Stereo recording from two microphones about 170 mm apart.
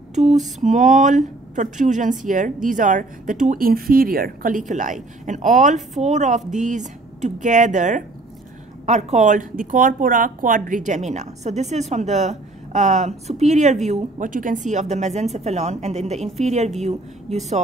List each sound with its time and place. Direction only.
0.1 s lullaby: 40° right (ahead or behind)
0.6 s a woman's voice: 45° right (ahead or behind)